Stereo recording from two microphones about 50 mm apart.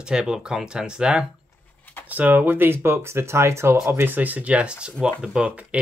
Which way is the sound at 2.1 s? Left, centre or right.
Right.